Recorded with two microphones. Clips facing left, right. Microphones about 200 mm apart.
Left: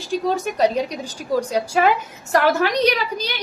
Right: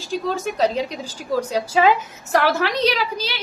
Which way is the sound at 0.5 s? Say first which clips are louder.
Even; 15° left (ahead or behind).